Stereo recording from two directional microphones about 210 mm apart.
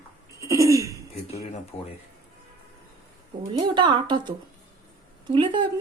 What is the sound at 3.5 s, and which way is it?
Speech, 20° right (ahead or behind).